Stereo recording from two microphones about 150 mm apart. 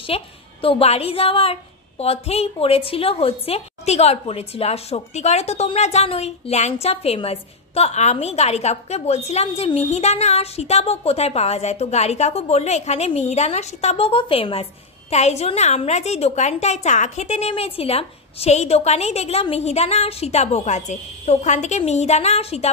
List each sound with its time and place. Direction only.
0.0 s a woman's voice: 35° left (ahead or behind)